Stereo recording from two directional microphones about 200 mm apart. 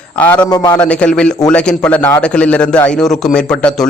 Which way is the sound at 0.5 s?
20° left (ahead or behind).